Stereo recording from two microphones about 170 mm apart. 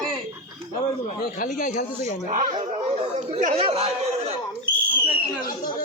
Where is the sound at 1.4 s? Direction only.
50° left (ahead or behind).